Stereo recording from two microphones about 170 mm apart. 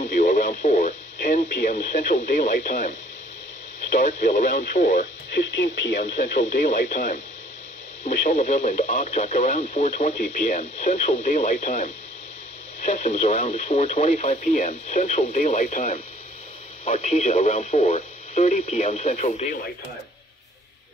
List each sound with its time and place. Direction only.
0.0 s speech: 50° left (ahead or behind)
5.3 s speech: 90° left
6.3 s speech: 55° left (ahead or behind)